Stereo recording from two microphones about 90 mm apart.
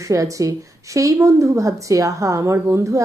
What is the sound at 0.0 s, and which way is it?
A woman's voice, 35° right (ahead or behind).